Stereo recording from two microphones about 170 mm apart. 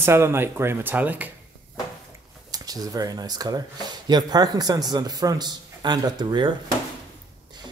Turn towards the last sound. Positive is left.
turn(degrees=-25)  # may be behind; listen again after turning